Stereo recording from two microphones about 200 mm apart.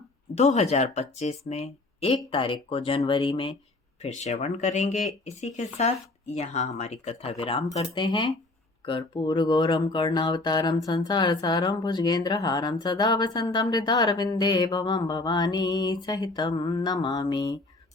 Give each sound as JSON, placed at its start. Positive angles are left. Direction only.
{"t": 0.3, "sound": "speech", "side_deg": 35}
{"t": 4.0, "sound": "speech", "side_deg": 35}